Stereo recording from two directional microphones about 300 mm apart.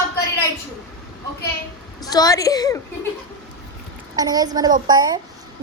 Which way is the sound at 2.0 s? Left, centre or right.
Centre.